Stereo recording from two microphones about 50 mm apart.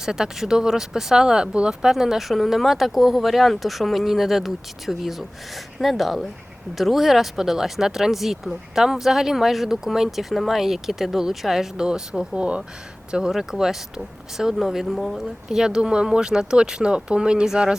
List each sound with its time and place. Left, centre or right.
0.0 s speech: centre
15.4 s speech: centre